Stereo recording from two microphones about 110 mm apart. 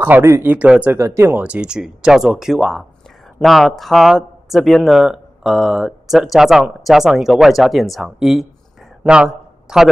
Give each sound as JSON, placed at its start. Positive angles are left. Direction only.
{"t": 0.0, "sound": "speech", "side_deg": -20}
{"t": 0.9, "sound": "speech", "side_deg": -25}
{"t": 1.4, "sound": "speech", "side_deg": -10}
{"t": 9.0, "sound": "a sound", "side_deg": -10}